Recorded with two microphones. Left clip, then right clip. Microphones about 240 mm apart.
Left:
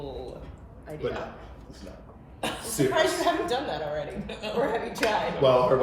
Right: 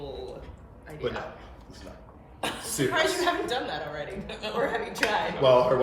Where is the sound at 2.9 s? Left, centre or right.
Centre.